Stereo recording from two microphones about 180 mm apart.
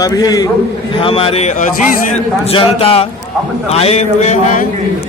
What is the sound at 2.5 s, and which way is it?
Speech, 30° left (ahead or behind).